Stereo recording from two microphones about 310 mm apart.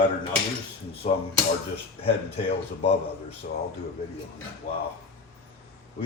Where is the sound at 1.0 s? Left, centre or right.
Left.